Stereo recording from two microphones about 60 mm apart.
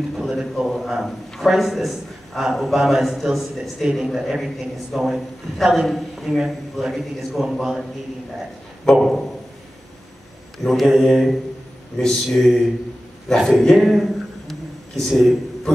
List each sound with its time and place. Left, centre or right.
0.2 s a man's voice: centre
9.0 s a man's voice: centre
10.6 s a man's voice: centre
13.4 s a sound: centre